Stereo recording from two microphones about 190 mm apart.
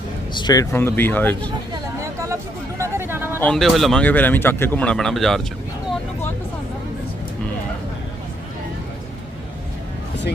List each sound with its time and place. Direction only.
0.3 s speech: 20° left (ahead or behind)
1.7 s speech: 15° right (ahead or behind)
3.3 s speech: 5° left (ahead or behind)